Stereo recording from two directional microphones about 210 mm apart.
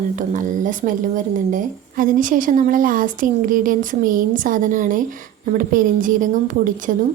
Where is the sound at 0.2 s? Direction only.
40° right (ahead or behind).